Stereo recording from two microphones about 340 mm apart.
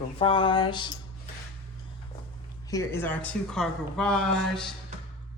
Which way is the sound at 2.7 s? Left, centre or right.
Centre.